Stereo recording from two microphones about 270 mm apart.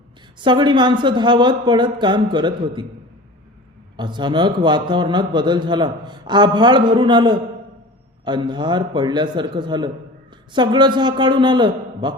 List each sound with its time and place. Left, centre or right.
0.3 s a man's voice: centre
3.9 s a man's voice: centre